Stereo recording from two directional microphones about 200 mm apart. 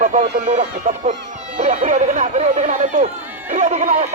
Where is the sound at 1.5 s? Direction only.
35° right (ahead or behind).